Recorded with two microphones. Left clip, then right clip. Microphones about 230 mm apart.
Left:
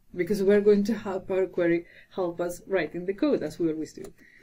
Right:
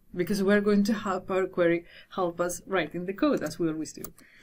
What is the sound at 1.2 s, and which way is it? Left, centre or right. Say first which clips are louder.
Speech: left 3 dB; centre.